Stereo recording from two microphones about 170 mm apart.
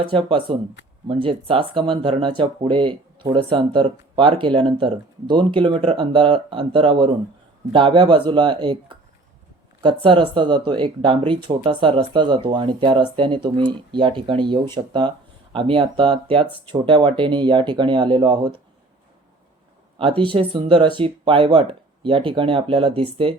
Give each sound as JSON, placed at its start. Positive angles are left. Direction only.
{"t": 0.0, "sound": "speech", "side_deg": -30}
{"t": 20.0, "sound": "speech", "side_deg": -30}